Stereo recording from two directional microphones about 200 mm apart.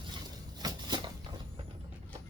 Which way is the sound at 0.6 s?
20° right (ahead or behind).